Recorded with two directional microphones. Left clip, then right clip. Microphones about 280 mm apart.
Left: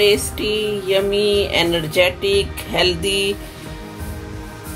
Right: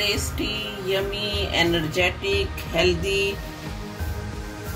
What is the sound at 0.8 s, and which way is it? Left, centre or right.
Speech, left.